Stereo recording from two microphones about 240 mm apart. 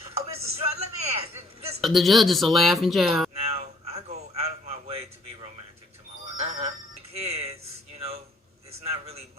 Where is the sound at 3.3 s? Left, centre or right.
Right.